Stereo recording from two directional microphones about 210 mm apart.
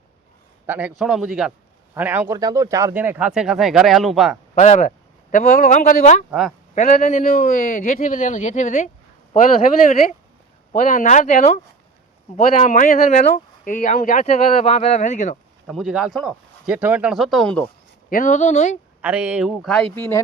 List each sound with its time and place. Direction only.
0.7 s speech: 5° right (ahead or behind)
4.5 s speech: 35° left (ahead or behind)
10.7 s speech: 35° left (ahead or behind)
15.6 s speech: centre (ahead or behind)
18.1 s speech: 40° left (ahead or behind)
19.0 s speech: 5° right (ahead or behind); by 20.2 s 10° left (ahead or behind)